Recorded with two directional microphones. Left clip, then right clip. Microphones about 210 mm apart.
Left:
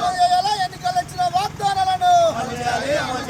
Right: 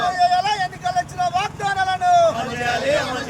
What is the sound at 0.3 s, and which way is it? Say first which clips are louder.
Vehicle: even; 15° left (ahead or behind).